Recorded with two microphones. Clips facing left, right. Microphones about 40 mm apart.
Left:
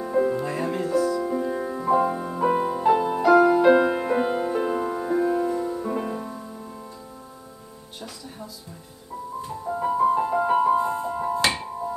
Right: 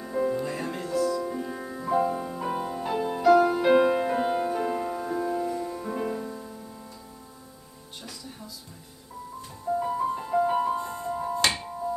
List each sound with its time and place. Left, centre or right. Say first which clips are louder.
0.0 s music: left 4 dB; centre
9.7 s music: left 5 dB; centre